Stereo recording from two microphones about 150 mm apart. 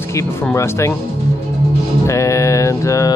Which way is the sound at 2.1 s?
20° left (ahead or behind).